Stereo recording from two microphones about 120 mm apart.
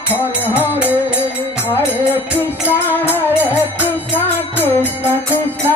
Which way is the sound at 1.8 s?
15° left (ahead or behind).